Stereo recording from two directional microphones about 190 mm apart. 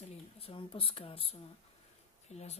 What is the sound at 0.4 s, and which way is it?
Speech, 30° left (ahead or behind).